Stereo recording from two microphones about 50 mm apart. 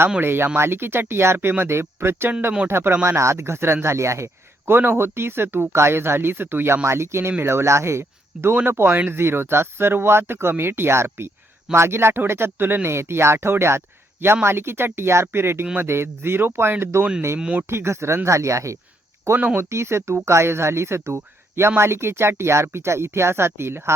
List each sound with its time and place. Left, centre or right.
0.2 s speech: right
4.6 s speech: right
6.8 s speech: right
8.5 s speech: right
18.3 s speech: right
19.5 s speech: right